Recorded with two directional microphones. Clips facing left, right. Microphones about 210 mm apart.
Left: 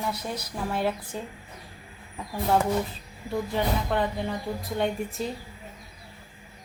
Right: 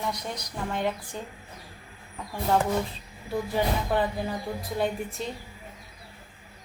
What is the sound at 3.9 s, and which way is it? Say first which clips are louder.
A woman's voice: even; 5° right (ahead or behind).